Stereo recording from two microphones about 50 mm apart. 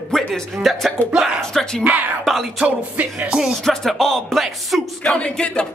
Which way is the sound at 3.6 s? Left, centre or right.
Centre.